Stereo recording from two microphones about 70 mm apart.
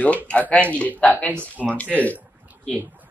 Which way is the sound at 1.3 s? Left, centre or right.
Right.